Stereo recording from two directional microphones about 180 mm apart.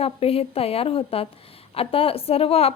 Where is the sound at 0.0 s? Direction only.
35° left (ahead or behind).